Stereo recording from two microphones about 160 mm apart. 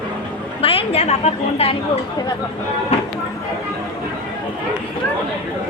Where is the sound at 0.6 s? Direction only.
35° left (ahead or behind).